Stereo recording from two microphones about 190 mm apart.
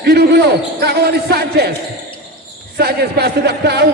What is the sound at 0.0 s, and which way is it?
A man's voice, 60° right (ahead or behind).